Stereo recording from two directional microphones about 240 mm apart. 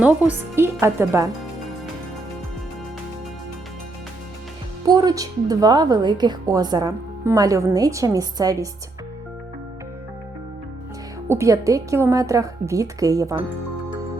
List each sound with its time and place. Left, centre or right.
0.0 s a woman's voice: centre
4.9 s a woman's voice: centre
11.3 s a woman's voice: centre